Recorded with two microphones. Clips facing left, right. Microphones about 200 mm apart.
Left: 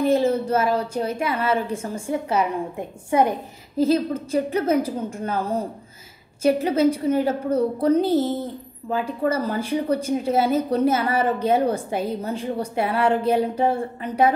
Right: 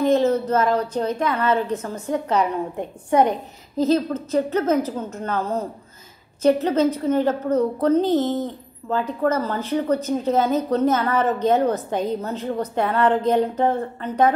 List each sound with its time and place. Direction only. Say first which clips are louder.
0.0 s a woman's voice: right 1 dB; 10° left (ahead or behind)